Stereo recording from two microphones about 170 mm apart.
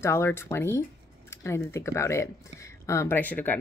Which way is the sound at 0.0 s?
15° left (ahead or behind).